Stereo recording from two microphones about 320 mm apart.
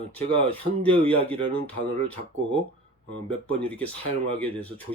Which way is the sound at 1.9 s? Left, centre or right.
Left.